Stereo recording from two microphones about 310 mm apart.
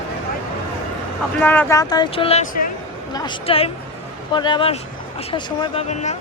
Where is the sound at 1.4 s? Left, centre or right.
Centre.